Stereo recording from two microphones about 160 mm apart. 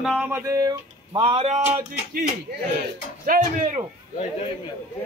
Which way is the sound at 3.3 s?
55° right (ahead or behind).